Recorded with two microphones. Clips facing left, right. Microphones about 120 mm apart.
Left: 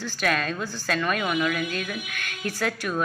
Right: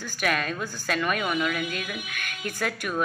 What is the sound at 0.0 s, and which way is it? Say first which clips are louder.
A woman's voice: left 1 dB; 5° right (ahead or behind).